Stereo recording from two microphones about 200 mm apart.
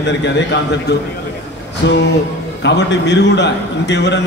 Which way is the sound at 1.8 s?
60° left (ahead or behind).